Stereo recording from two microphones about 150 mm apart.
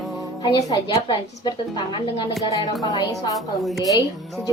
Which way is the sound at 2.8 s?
25° left (ahead or behind).